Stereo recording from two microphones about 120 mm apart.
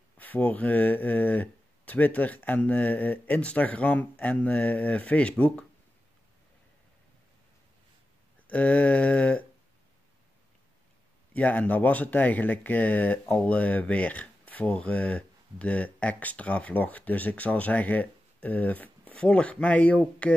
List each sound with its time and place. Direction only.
0.2 s speech: 15° left (ahead or behind)
8.5 s speech: 10° left (ahead or behind)
11.3 s speech: 15° left (ahead or behind)